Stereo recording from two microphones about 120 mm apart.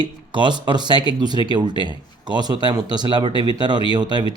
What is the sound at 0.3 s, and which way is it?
Speech, 40° right (ahead or behind).